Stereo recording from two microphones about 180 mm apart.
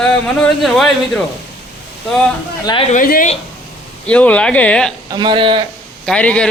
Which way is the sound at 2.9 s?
50° left (ahead or behind).